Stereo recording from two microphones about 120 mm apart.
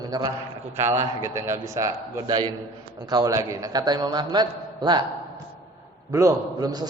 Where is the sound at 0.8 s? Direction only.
20° right (ahead or behind).